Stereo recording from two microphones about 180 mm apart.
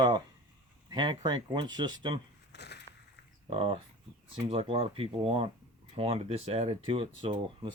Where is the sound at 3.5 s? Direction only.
30° right (ahead or behind).